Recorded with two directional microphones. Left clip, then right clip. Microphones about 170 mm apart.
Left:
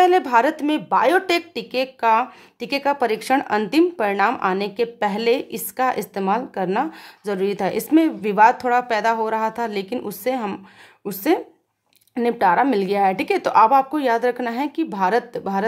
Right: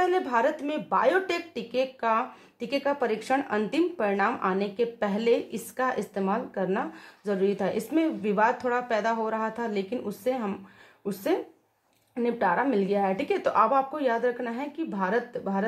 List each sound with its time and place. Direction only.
0.0 s a woman's voice: 45° left (ahead or behind)
12.1 s a woman's voice: 50° left (ahead or behind)